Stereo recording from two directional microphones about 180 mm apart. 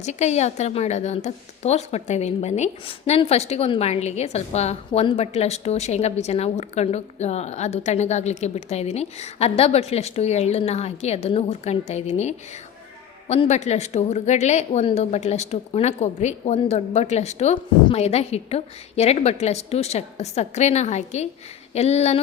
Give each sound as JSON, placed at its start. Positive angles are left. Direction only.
{"t": 0.0, "sound": "a woman's voice", "side_deg": 40}